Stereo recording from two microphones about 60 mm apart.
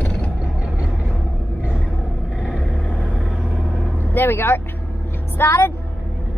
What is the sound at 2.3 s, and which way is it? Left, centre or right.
Vehicle, centre.